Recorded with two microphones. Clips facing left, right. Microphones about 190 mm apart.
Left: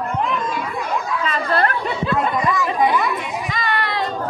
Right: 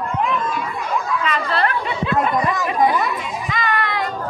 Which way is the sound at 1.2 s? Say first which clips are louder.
Left 3 dB; 40° left (ahead or behind).